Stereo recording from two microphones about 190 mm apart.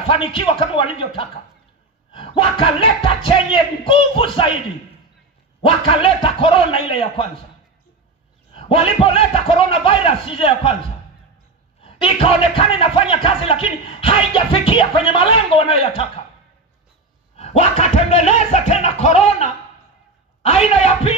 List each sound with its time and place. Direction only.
0.1 s speech: 25° left (ahead or behind)
5.9 s speech: 30° left (ahead or behind)
8.5 s speech: 30° left (ahead or behind)
11.8 s speech: 30° left (ahead or behind)
17.4 s music: 35° left (ahead or behind)